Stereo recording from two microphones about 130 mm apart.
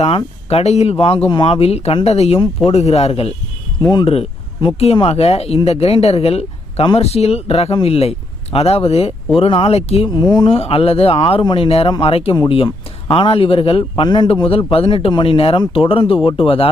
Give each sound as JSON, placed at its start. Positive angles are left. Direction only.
{"t": 0.5, "sound": "speech", "side_deg": 55}